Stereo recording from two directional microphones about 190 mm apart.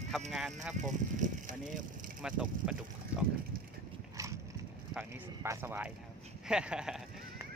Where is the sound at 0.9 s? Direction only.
40° right (ahead or behind).